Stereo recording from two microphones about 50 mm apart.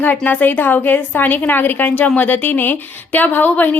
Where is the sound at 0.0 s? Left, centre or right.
Left.